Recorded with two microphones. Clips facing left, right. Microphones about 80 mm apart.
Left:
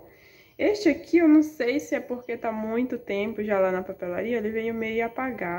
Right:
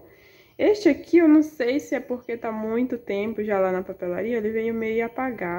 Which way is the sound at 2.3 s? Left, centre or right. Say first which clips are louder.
Even; right.